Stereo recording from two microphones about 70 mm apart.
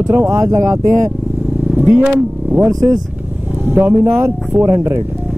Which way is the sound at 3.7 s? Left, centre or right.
Right.